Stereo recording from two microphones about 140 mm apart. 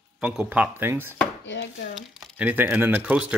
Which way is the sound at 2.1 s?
Centre (ahead or behind).